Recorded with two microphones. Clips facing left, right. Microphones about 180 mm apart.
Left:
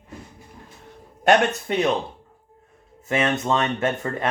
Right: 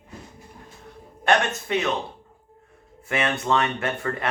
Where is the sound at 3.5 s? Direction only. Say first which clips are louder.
Left 1 dB; 25° left (ahead or behind).